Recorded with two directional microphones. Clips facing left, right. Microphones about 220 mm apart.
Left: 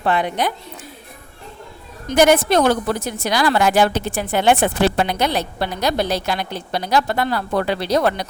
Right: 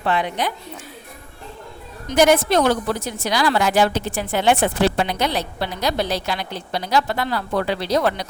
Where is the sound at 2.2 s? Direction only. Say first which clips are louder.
Left 1 dB; 55° left (ahead or behind).